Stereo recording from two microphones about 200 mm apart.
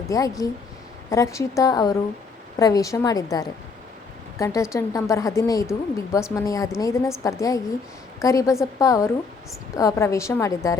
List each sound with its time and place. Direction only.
0.1 s speech: 15° left (ahead or behind)